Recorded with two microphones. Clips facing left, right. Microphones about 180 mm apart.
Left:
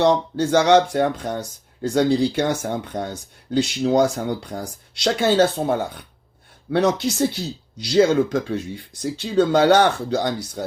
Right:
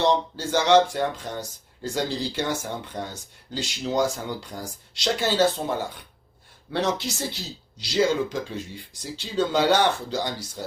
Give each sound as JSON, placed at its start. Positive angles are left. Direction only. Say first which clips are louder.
{"t": 0.0, "sound": "speech", "louder": "left 5 dB", "side_deg": 55}